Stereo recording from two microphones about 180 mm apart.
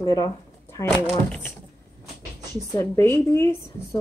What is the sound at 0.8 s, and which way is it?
Speech, centre (ahead or behind).